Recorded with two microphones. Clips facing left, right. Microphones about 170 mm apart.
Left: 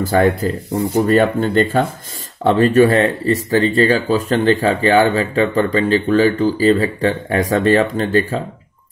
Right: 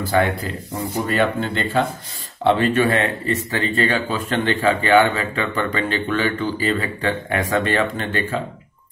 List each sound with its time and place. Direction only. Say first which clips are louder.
0.0 s speech: left 5 dB; 45° left (ahead or behind)